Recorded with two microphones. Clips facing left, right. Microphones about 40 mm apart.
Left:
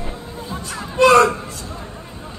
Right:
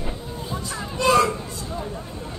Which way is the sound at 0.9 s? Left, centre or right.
Left.